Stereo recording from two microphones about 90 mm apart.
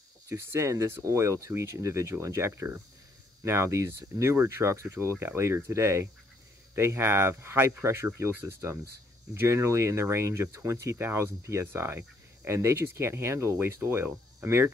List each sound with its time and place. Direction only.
0.3 s speech: 30° right (ahead or behind)